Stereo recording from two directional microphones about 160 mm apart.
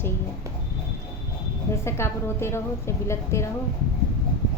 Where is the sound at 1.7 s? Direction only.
15° left (ahead or behind).